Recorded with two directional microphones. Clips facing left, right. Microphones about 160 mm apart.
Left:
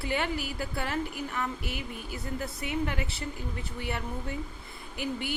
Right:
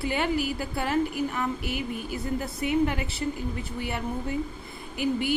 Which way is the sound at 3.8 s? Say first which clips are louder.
Right 3 dB; 10° right (ahead or behind).